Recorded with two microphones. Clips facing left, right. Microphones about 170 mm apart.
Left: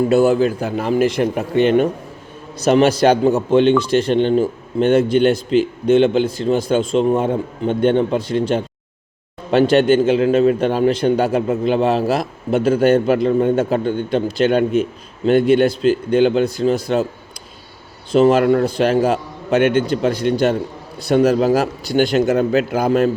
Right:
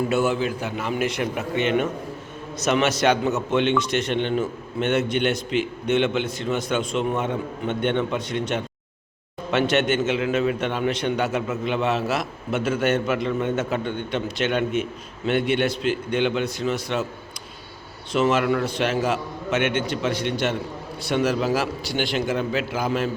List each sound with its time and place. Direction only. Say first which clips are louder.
0.1 s speech: left 8 dB; 35° left (ahead or behind)
18.1 s speech: left 8 dB; 35° left (ahead or behind)